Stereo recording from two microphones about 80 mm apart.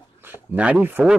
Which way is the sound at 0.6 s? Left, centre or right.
Centre.